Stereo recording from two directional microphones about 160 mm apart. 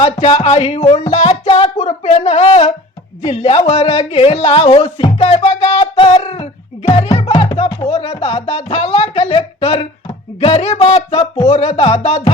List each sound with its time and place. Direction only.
0.0 s a woman's voice: 35° left (ahead or behind)